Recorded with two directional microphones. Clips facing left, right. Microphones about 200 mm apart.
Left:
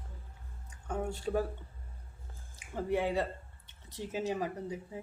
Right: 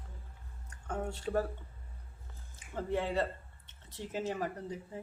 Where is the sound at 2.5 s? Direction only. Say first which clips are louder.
Left 2 dB; 10° left (ahead or behind).